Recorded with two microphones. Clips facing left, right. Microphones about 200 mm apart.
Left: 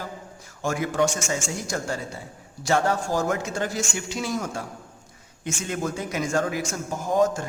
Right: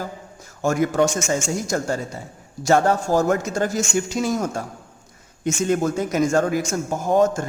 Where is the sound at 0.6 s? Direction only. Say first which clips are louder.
Right 5 dB; 45° right (ahead or behind).